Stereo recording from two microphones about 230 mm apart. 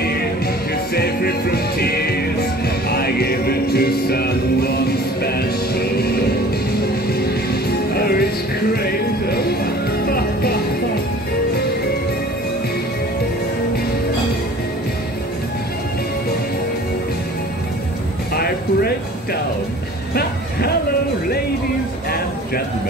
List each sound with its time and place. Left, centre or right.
0.9 s music: left
7.9 s music: left
18.3 s a sound: left